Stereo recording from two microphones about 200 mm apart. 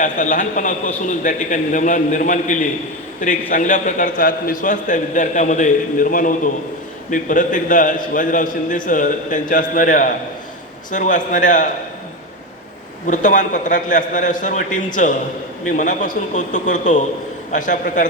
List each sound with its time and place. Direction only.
0.0 s a man's voice: 40° left (ahead or behind)
13.1 s a man's voice: 40° left (ahead or behind)